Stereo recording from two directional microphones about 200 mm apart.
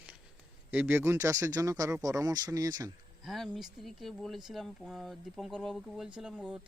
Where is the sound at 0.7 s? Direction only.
10° right (ahead or behind).